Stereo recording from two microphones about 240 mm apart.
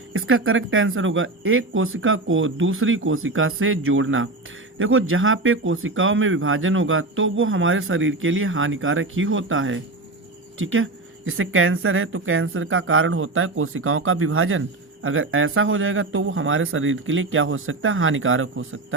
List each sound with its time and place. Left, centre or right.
0.1 s speech: right